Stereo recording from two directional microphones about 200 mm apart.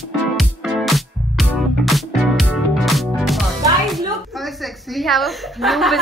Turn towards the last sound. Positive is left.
turn(degrees=0)  # may be behind; listen again after turning